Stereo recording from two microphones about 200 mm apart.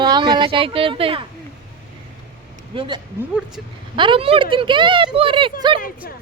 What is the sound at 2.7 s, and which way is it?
Speech, 25° right (ahead or behind).